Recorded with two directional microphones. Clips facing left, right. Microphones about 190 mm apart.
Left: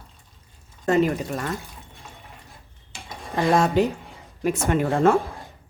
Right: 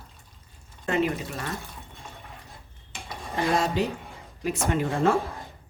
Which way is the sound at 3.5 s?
50° left (ahead or behind).